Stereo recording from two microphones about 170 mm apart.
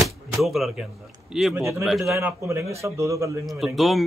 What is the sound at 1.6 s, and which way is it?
Speech, 15° right (ahead or behind).